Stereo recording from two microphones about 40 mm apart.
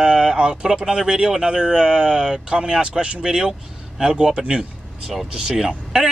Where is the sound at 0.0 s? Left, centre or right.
Centre.